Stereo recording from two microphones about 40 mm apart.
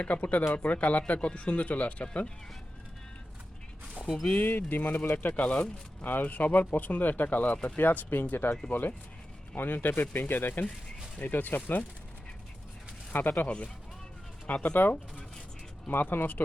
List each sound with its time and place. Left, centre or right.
0.0 s speech: left
4.4 s speech: left
5.3 s speech: left
6.1 s speech: left
7.8 s speech: left
13.1 s speech: left
14.4 s speech: left
15.9 s speech: left